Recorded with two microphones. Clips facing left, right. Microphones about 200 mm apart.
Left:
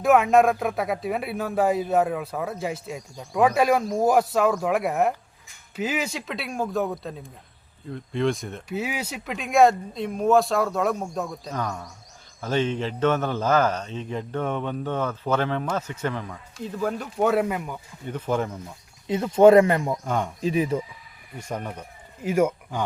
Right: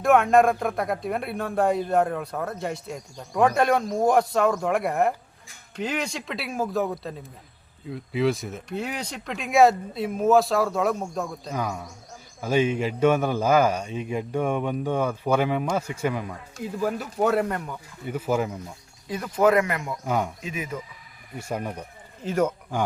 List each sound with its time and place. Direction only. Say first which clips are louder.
0.0 s a man's voice: even; centre (ahead or behind)
18.0 s a man's voice: right 1 dB; 10° right (ahead or behind)
19.0 s speech: left 6 dB; 25° left (ahead or behind)
20.1 s a man's voice: right 6 dB; 5° right (ahead or behind)
20.4 s speech: left 9 dB; 35° left (ahead or behind)
21.3 s a man's voice: right 2 dB; 10° right (ahead or behind)
22.2 s speech: left 2 dB; 10° left (ahead or behind)